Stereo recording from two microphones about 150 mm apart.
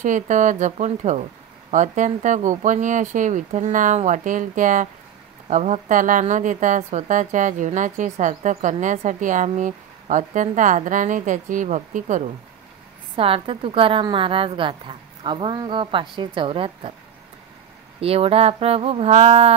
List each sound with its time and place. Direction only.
0.0 s a woman's voice: 55° right (ahead or behind)
13.1 s a woman's voice: 40° right (ahead or behind)
18.0 s a woman's voice: 40° right (ahead or behind)